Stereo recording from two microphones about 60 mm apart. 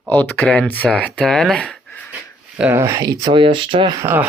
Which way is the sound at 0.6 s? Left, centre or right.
Left.